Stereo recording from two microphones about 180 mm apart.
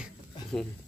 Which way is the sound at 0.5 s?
10° left (ahead or behind).